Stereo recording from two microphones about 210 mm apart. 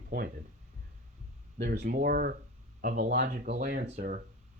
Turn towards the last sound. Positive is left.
turn(degrees=-40)  # may be behind; listen again after turning